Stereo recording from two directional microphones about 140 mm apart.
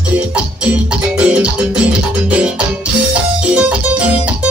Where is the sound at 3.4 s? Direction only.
10° right (ahead or behind).